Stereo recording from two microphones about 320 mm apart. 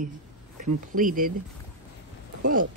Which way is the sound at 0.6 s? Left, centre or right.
Right.